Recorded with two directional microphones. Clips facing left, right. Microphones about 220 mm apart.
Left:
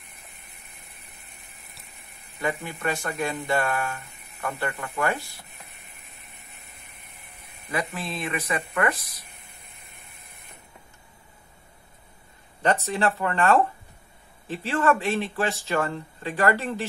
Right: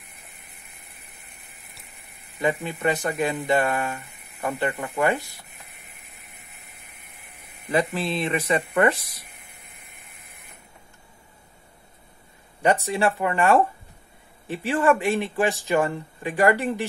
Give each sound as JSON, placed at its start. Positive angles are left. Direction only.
{"t": 2.4, "sound": "speech", "side_deg": -20}
{"t": 8.1, "sound": "speech", "side_deg": -25}
{"t": 12.6, "sound": "speech", "side_deg": -10}